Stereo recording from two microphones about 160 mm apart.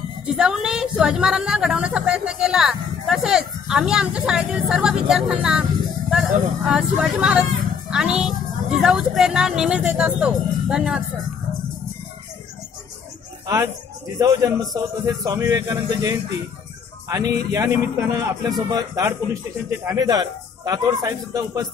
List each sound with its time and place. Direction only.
0.3 s a woman's voice: 5° right (ahead or behind)
14.1 s a man's voice: 20° right (ahead or behind)